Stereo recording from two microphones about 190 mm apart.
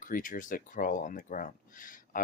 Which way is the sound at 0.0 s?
45° left (ahead or behind).